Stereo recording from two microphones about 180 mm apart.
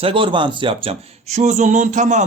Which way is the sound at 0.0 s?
30° right (ahead or behind).